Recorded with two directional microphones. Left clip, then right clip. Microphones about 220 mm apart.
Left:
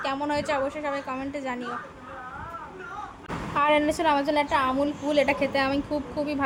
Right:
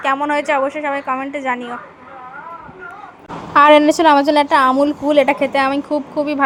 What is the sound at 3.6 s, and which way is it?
A woman's voice, 40° right (ahead or behind).